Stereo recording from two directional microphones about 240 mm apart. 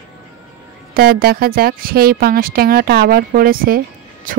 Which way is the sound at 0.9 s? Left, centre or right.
Right.